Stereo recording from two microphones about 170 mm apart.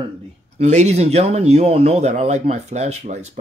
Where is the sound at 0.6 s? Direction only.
45° right (ahead or behind).